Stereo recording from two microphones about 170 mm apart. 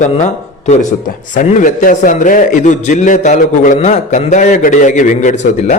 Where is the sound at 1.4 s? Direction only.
50° left (ahead or behind).